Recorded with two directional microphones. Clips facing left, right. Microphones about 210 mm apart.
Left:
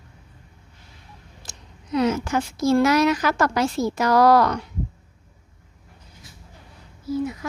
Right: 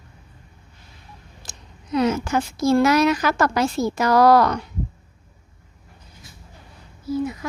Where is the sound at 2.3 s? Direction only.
40° right (ahead or behind).